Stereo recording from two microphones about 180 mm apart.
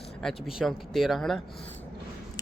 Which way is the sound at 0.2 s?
Centre (ahead or behind).